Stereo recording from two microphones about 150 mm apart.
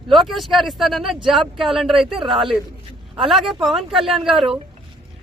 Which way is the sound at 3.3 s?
Centre (ahead or behind).